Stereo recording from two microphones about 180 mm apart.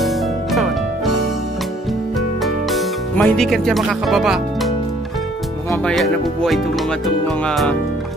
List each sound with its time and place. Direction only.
0.0 s music: centre (ahead or behind)
2.4 s music: centre (ahead or behind)
5.9 s speech: centre (ahead or behind)